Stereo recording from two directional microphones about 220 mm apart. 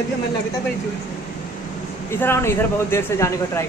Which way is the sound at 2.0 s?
10° left (ahead or behind).